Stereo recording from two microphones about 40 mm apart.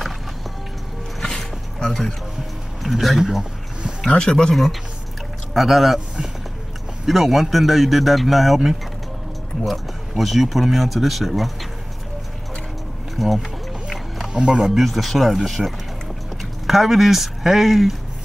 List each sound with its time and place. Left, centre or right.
1.2 s a sound: centre
2.8 s speech: centre
4.1 s speech: left
5.5 s speech: centre
7.1 s speech: centre
9.7 s speech: centre
13.1 s speech: centre
14.3 s speech: right
14.8 s speech: centre